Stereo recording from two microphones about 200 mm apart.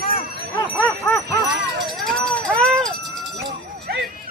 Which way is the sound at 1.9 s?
Centre (ahead or behind).